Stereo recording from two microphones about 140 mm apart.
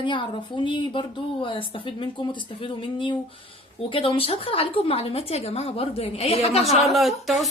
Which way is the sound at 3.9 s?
40° left (ahead or behind).